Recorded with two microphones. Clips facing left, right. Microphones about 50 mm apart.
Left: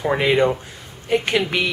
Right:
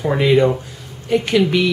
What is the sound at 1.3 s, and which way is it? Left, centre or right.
Speech, centre.